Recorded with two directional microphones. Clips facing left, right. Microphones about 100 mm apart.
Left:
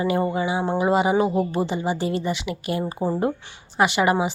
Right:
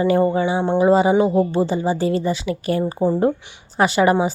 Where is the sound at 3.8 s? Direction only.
30° right (ahead or behind).